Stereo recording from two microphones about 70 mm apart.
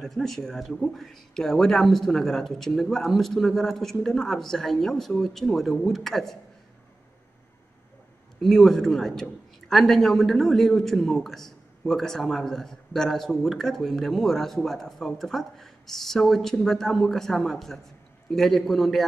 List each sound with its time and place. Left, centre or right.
0.0 s a man's voice: centre
8.4 s a man's voice: centre